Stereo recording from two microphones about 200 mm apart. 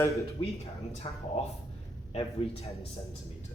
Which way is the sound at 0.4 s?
30° left (ahead or behind).